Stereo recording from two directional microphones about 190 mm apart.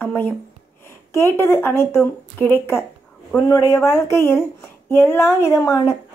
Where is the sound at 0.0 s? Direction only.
10° left (ahead or behind).